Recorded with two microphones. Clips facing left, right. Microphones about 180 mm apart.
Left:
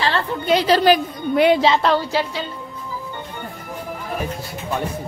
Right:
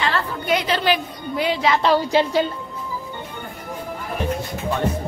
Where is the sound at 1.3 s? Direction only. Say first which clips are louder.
Left 8 dB; 65° left (ahead or behind).